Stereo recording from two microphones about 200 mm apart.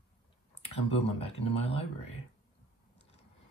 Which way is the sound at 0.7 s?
30° left (ahead or behind).